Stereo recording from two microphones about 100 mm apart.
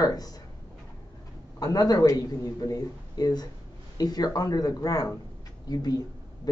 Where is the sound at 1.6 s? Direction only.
40° left (ahead or behind).